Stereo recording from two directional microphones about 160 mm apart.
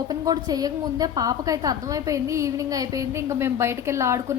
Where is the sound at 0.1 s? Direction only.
25° right (ahead or behind).